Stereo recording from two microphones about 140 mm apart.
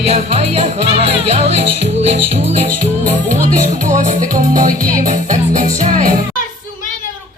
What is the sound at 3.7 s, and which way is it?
Music, 65° right (ahead or behind).